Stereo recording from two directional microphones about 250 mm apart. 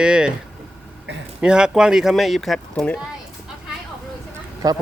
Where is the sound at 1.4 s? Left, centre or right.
Centre.